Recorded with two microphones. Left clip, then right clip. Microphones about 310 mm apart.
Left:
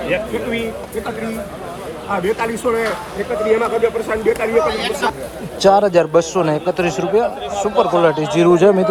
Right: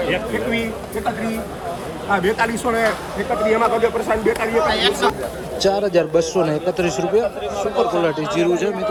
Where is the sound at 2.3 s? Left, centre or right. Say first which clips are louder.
Left 1 dB; centre.